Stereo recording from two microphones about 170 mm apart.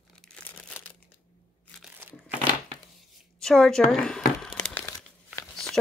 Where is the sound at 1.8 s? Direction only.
10° right (ahead or behind).